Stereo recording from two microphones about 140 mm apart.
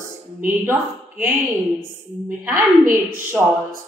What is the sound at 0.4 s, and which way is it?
Speech, 15° right (ahead or behind).